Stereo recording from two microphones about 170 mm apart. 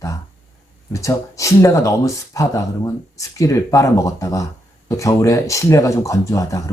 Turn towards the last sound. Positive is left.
turn(degrees=20)  # may be behind; listen again after turning